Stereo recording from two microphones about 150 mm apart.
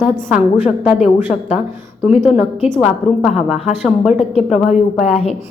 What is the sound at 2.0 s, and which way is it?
A woman's voice, 10° right (ahead or behind).